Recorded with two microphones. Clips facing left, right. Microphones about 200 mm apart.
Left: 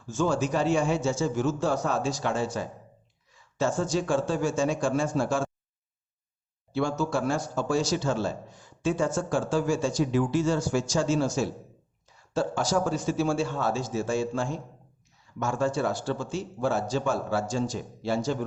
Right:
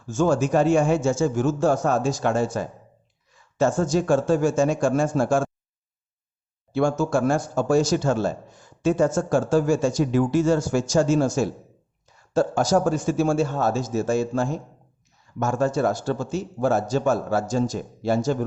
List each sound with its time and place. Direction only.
0.1 s speech: 45° right (ahead or behind)
6.7 s speech: 50° right (ahead or behind)